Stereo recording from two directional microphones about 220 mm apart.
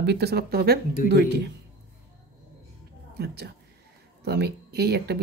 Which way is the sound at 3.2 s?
45° right (ahead or behind).